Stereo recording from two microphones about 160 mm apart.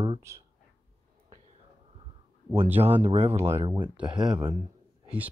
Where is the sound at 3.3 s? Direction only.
15° right (ahead or behind).